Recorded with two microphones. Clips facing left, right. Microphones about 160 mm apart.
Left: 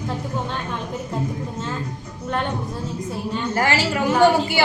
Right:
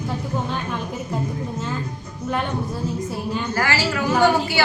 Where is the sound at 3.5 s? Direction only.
25° left (ahead or behind).